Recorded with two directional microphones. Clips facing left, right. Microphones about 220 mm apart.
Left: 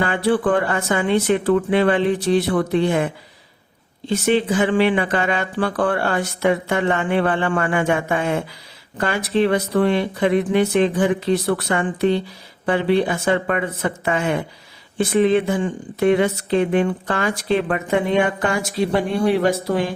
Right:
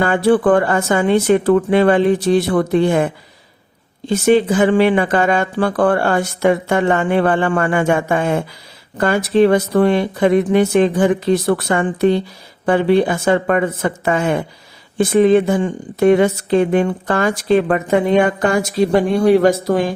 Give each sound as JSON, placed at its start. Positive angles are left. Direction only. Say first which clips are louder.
{"t": 0.0, "sound": "speech", "louder": "right 5 dB", "side_deg": -45}
{"t": 4.1, "sound": "speech", "louder": "right 5 dB", "side_deg": -45}